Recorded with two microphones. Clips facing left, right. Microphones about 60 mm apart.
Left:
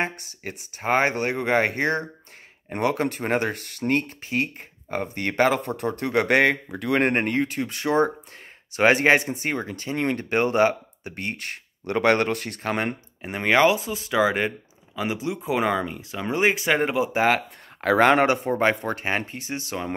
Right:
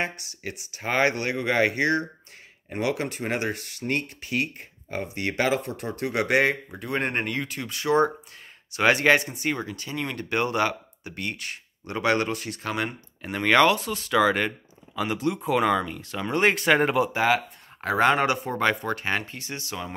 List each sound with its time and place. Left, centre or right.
0.0 s speech: left
4.2 s speech: left
13.2 s speech: left; by 17.1 s centre
17.1 s speech: left
18.2 s speech: left